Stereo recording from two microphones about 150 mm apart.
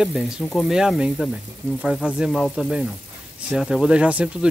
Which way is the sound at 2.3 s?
5° left (ahead or behind).